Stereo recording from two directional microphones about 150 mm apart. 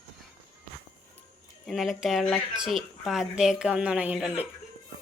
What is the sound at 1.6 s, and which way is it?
A woman's voice, centre (ahead or behind).